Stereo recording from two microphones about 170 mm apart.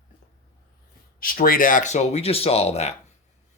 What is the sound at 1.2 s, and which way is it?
Speech, 55° left (ahead or behind).